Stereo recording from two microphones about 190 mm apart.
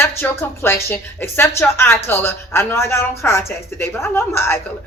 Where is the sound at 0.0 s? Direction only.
10° left (ahead or behind).